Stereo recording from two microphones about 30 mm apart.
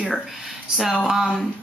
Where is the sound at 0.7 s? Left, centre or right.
Centre.